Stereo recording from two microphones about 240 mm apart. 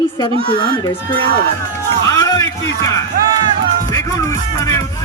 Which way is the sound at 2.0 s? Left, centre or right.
Centre.